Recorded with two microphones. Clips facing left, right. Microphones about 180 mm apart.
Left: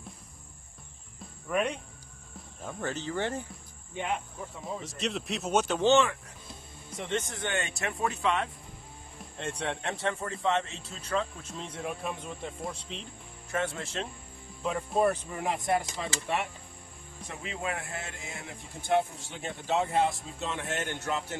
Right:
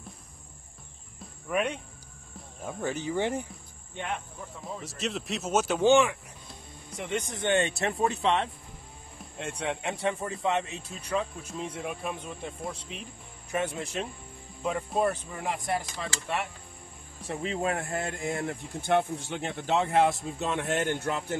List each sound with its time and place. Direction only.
1.2 s cricket: centre (ahead or behind)
2.3 s speech: 10° right (ahead or behind)
3.9 s speech: 5° left (ahead or behind)
7.2 s speech: 20° right (ahead or behind)
7.6 s speech: 35° right (ahead or behind)
9.2 s speech: 5° right (ahead or behind)
10.0 s speech: 15° right (ahead or behind)
13.5 s speech: 20° right (ahead or behind)
14.8 s speech: centre (ahead or behind)
15.5 s speech: 25° left (ahead or behind)
16.0 s speech: centre (ahead or behind)
17.3 s speech: 35° right (ahead or behind)
19.2 s speech: 65° right (ahead or behind)